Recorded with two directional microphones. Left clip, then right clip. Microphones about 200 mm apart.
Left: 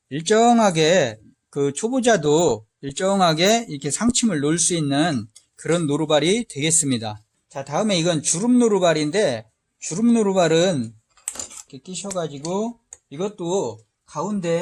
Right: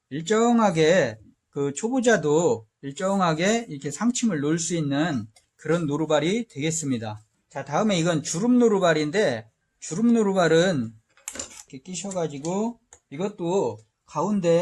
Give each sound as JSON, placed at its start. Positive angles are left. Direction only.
{"t": 0.1, "sound": "speech", "side_deg": 40}
{"t": 7.5, "sound": "a man's voice", "side_deg": 30}
{"t": 12.0, "sound": "a man's voice", "side_deg": 30}
{"t": 14.1, "sound": "speech", "side_deg": 10}